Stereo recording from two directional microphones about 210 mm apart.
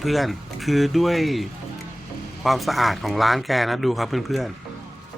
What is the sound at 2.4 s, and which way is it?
Speech, centre (ahead or behind).